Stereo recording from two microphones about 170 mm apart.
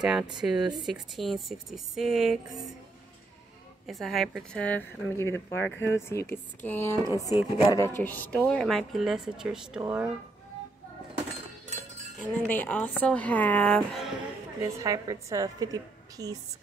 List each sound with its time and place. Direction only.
0.0 s a woman's voice: 5° right (ahead or behind)
3.8 s a woman's voice: centre (ahead or behind); by 7.2 s 15° left (ahead or behind)
7.2 s a woman's voice: 20° right (ahead or behind)
8.0 s a woman's voice: 10° left (ahead or behind); by 10.1 s 10° right (ahead or behind)
12.2 s a woman's voice: 10° left (ahead or behind)
14.6 s a woman's voice: 20° right (ahead or behind)